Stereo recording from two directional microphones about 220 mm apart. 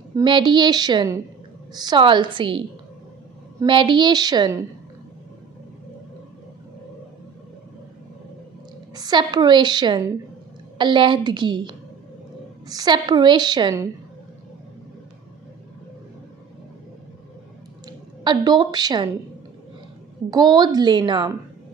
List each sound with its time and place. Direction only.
0.1 s a woman's voice: 20° right (ahead or behind)
8.9 s a woman's voice: 20° right (ahead or behind)
17.8 s a woman's voice: 20° right (ahead or behind)
20.2 s a woman's voice: 20° right (ahead or behind)